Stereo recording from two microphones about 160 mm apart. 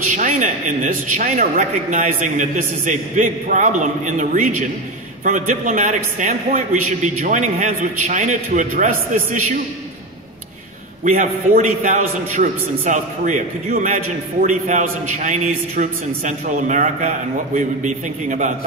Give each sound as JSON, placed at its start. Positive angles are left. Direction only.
{"t": 0.1, "sound": "a man's voice", "side_deg": -55}
{"t": 11.1, "sound": "a man's voice", "side_deg": -55}